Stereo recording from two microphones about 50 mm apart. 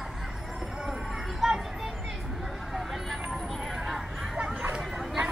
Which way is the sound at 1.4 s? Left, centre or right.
Centre.